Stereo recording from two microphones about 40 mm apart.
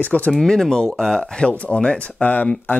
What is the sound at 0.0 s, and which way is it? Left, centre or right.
Speech, left.